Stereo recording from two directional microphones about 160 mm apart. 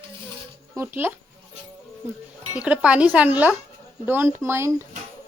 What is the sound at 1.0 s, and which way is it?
Speech, 15° right (ahead or behind).